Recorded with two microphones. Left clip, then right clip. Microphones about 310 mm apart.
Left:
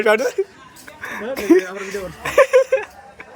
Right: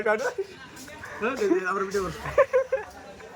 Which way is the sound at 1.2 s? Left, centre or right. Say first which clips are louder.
Left 8 dB; centre.